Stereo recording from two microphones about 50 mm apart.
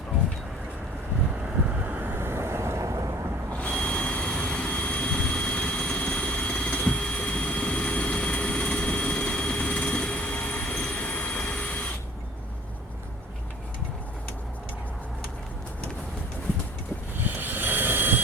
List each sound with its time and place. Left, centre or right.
1.7 s vehicle: right
2.2 s vehicle: right
3.6 s vehicle: left
17.2 s a sound: right